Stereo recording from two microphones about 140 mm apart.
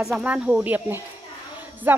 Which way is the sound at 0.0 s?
5° right (ahead or behind).